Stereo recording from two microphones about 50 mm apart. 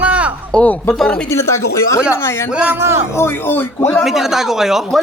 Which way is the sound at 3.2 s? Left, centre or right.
Left.